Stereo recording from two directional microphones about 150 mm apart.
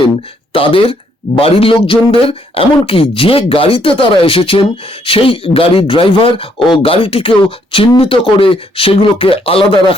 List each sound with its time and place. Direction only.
0.5 s speech: 35° left (ahead or behind)